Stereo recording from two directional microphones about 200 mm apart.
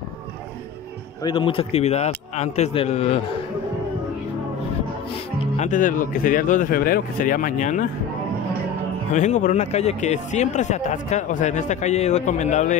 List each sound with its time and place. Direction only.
1.2 s speech: 25° left (ahead or behind)
5.6 s speech: 40° left (ahead or behind)
9.1 s speech: 35° left (ahead or behind)